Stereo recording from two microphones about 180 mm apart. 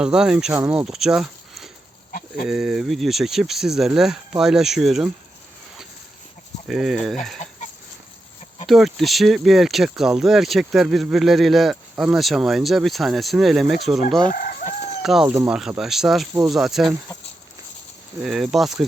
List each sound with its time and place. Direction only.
0.0 s speech: 5° right (ahead or behind)
6.7 s speech: centre (ahead or behind)
8.6 s speech: centre (ahead or behind)
14.3 s chicken: 55° left (ahead or behind)
15.0 s speech: 5° right (ahead or behind)
18.2 s speech: centre (ahead or behind)